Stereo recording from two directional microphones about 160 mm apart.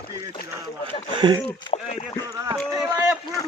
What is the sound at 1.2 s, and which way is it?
Speech, 25° right (ahead or behind).